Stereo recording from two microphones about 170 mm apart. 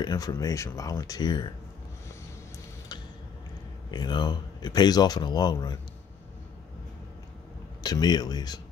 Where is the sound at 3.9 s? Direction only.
25° left (ahead or behind).